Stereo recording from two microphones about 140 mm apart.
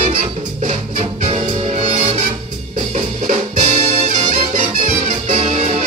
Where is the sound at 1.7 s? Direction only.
55° right (ahead or behind).